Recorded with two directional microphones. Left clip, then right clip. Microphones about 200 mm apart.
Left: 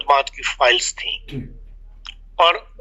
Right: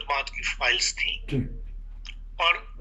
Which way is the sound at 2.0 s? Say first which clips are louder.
Left 8 dB; 40° left (ahead or behind).